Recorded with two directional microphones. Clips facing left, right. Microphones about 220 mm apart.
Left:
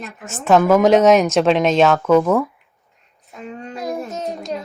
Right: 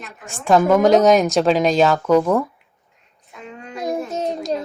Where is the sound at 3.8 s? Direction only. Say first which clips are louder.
Right 3 dB; 30° right (ahead or behind).